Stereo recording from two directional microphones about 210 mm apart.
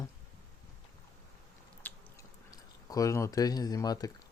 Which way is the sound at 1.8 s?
15° left (ahead or behind).